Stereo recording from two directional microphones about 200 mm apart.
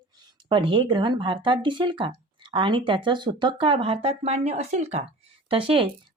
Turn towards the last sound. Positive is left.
turn(degrees=-25)  # may be behind; listen again after turning